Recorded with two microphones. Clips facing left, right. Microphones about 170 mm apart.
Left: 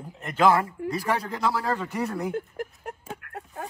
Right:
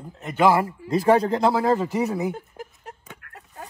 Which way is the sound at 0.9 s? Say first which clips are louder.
Right 13 dB; 30° right (ahead or behind).